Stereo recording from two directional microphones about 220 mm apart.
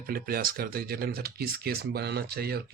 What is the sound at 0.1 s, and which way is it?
Speech, 40° right (ahead or behind).